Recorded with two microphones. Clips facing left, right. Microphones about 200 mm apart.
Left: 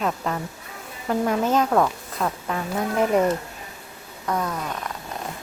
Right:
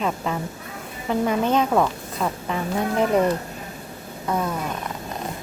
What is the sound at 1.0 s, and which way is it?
Speech, centre (ahead or behind).